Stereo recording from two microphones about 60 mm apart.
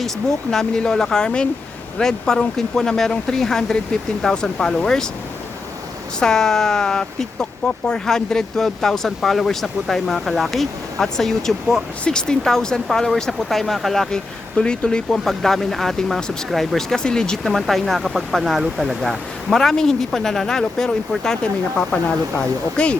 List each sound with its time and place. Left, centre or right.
0.0 s speech: centre
6.1 s speech: centre